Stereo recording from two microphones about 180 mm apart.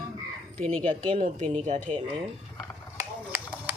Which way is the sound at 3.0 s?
15° right (ahead or behind).